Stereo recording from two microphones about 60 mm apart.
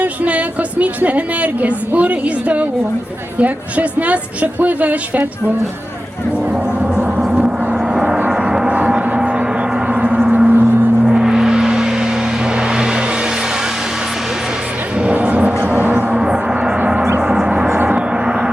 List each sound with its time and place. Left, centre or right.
0.0 s speech: right
7.2 s gong: centre; by 10.8 s right
11.0 s gong: centre
12.5 s vehicle: centre
15.1 s a sound: right
15.7 s gong: right; by 16.7 s centre
17.8 s gong: centre